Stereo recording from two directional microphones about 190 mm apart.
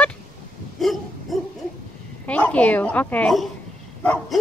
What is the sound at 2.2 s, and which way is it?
Speech, 10° left (ahead or behind).